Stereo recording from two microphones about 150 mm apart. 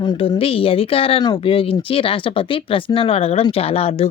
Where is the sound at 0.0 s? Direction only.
35° left (ahead or behind).